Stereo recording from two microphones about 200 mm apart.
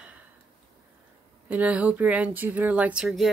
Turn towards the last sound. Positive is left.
turn(degrees=-5)  # may be behind; listen again after turning